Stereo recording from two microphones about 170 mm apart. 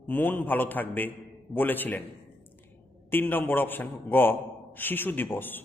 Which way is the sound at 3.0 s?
10° left (ahead or behind).